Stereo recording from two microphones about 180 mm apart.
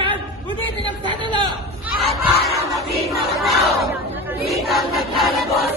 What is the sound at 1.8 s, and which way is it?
Battle cry, centre (ahead or behind).